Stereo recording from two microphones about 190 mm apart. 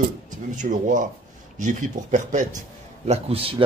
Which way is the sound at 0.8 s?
40° right (ahead or behind).